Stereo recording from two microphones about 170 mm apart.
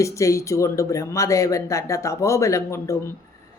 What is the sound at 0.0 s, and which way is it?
Speech, 20° left (ahead or behind).